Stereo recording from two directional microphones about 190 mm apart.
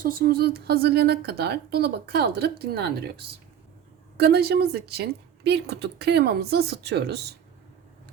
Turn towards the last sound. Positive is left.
turn(degrees=-60)  # may be behind; listen again after turning